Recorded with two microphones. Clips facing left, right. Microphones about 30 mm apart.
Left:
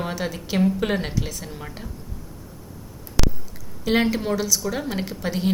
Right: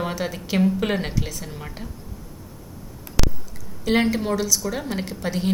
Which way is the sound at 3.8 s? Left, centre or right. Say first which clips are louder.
Even; centre.